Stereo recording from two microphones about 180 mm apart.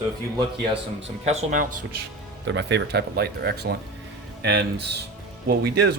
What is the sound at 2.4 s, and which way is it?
Speech, 75° right (ahead or behind).